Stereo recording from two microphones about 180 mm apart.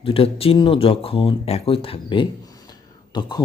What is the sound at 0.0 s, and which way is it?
Speech, 30° left (ahead or behind).